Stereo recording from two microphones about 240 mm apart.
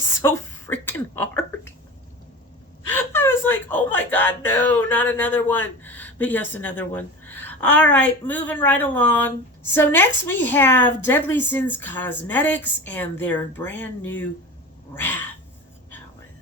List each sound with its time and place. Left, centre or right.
0.2 s speech: centre
2.9 s a woman's voice: centre